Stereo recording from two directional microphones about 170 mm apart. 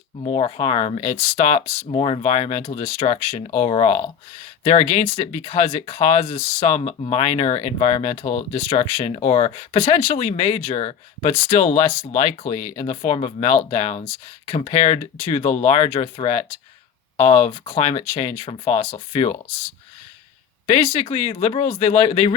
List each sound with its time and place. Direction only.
0.2 s speech: 35° left (ahead or behind)
20.7 s speech: 35° left (ahead or behind)